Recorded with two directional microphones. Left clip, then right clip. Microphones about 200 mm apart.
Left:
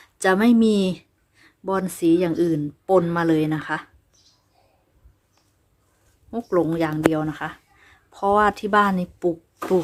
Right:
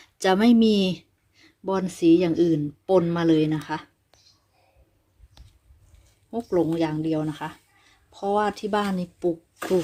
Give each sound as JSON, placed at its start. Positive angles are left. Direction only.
{"t": 0.0, "sound": "speech", "side_deg": -10}
{"t": 6.3, "sound": "speech", "side_deg": -5}